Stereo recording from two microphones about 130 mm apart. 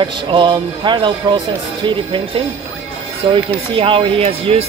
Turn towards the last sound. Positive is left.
turn(degrees=-50)  # may be behind; listen again after turning